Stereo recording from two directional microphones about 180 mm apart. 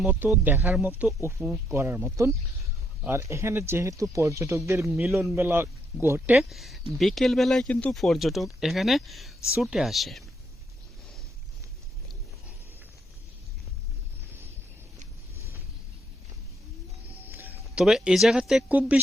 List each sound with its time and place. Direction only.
0.0 s speech: 5° right (ahead or behind)
4.9 s speech: centre (ahead or behind)
6.3 s speech: centre (ahead or behind)
17.2 s speech: 10° right (ahead or behind)